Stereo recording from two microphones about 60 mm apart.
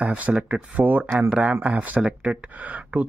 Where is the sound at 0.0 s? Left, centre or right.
Right.